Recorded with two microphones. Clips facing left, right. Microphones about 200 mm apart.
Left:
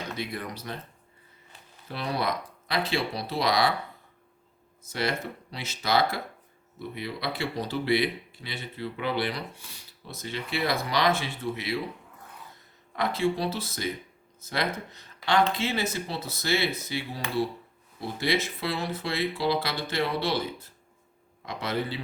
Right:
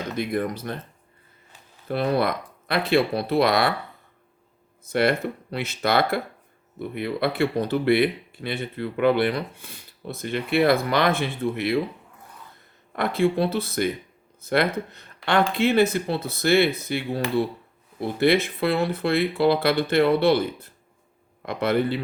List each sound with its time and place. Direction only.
0.2 s speech: 50° right (ahead or behind)
1.9 s speech: 55° right (ahead or behind)
4.8 s speech: 60° right (ahead or behind)
13.0 s speech: 55° right (ahead or behind)